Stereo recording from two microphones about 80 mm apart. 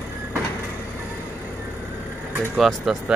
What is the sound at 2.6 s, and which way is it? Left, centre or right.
Speech, centre.